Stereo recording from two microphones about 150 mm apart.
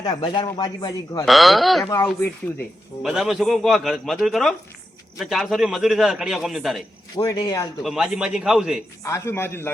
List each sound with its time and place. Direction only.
0.0 s speech: 30° left (ahead or behind)
1.2 s a man's voice: centre (ahead or behind)
3.0 s a man's voice: centre (ahead or behind)
7.2 s speech: 25° left (ahead or behind)
7.8 s a man's voice: 5° right (ahead or behind)
9.0 s a man's voice: 20° left (ahead or behind)